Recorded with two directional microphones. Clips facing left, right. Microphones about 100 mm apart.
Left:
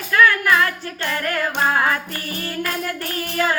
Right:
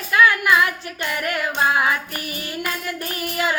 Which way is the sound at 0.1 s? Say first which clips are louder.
Even; 15° right (ahead or behind).